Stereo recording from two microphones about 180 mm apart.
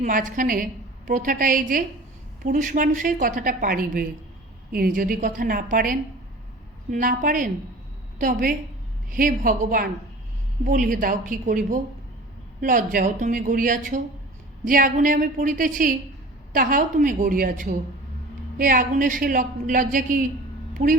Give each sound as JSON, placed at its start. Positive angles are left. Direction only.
{"t": 0.0, "sound": "a woman's voice", "side_deg": -45}